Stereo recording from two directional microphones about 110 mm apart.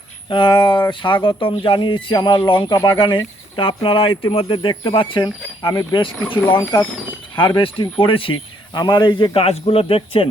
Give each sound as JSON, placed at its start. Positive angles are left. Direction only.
{"t": 0.3, "sound": "speech", "side_deg": 45}
{"t": 6.4, "sound": "speech", "side_deg": 20}
{"t": 7.3, "sound": "speech", "side_deg": 50}
{"t": 8.7, "sound": "speech", "side_deg": 40}